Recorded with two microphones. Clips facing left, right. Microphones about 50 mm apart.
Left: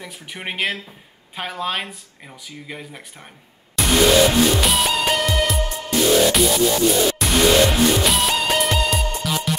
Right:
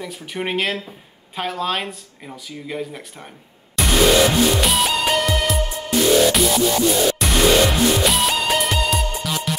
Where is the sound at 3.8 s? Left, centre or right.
Centre.